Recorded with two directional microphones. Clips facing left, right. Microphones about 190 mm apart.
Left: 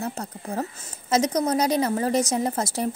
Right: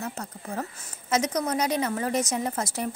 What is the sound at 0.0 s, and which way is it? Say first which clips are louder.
A woman's voice: left 4 dB; 35° left (ahead or behind).